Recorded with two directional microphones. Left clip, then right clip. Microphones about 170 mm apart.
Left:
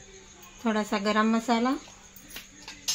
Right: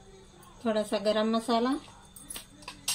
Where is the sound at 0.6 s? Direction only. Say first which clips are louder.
Even; 45° left (ahead or behind).